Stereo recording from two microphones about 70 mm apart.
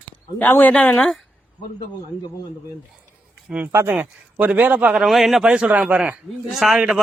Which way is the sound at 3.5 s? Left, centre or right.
Centre.